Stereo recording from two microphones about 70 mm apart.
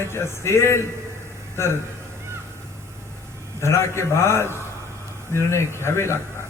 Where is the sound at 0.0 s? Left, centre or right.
Left.